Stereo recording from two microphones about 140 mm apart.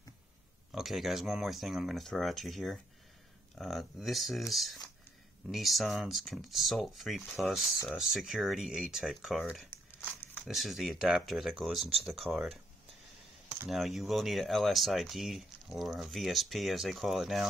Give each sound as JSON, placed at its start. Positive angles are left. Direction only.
{"t": 0.7, "sound": "speech", "side_deg": 0}
{"t": 11.8, "sound": "speech", "side_deg": -45}
{"t": 12.1, "sound": "speech", "side_deg": 0}
{"t": 13.7, "sound": "speech", "side_deg": 0}